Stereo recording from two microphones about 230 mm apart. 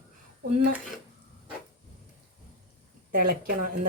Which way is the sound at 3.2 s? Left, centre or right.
Right.